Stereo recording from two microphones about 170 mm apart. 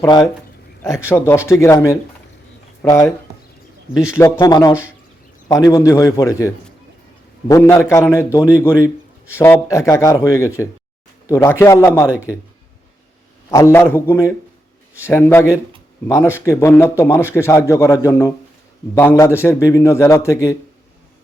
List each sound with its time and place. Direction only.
0.0 s a man's voice: 25° left (ahead or behind)
1.1 s a man's voice: 15° left (ahead or behind)
4.2 s a man's voice: 20° left (ahead or behind)
12.0 s speech: 10° right (ahead or behind)
13.5 s a man's voice: 15° left (ahead or behind)